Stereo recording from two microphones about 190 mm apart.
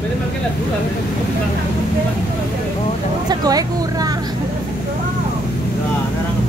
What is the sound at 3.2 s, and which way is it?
Speech, 20° right (ahead or behind).